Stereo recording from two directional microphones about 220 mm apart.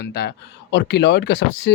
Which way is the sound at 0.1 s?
50° left (ahead or behind).